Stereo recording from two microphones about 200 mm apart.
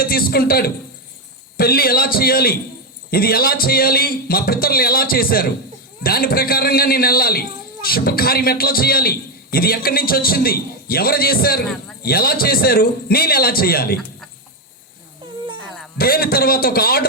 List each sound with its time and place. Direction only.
0.0 s a man's voice: 50° left (ahead or behind)
16.0 s a man's voice: 50° left (ahead or behind)